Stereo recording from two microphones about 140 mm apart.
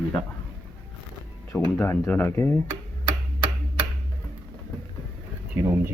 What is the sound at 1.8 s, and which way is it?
Speech, 15° left (ahead or behind).